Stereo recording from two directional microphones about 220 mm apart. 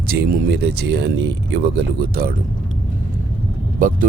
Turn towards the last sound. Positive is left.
turn(degrees=-40)  # may be behind; listen again after turning